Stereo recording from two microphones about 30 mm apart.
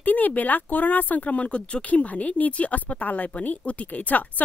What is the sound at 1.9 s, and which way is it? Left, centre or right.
Speech, left.